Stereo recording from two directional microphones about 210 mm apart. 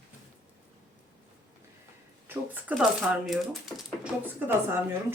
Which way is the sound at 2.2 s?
10° right (ahead or behind).